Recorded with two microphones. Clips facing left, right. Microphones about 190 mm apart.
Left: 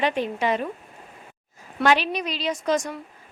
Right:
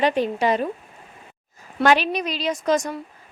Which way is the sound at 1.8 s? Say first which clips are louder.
Right 2 dB; 45° right (ahead or behind).